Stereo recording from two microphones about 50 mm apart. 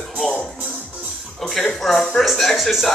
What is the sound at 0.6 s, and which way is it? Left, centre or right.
Music, right.